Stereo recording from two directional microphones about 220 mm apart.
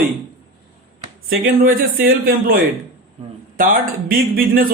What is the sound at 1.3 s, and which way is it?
Speech, 40° right (ahead or behind).